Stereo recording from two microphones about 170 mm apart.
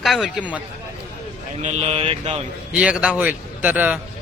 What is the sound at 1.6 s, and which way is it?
Speech, 40° right (ahead or behind).